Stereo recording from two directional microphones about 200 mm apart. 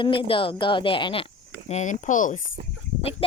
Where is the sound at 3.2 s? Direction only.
30° left (ahead or behind).